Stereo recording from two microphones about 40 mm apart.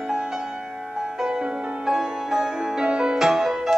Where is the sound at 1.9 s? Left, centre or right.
Centre.